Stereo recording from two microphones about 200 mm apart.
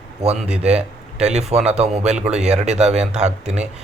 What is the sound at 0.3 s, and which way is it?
Speech, 30° right (ahead or behind).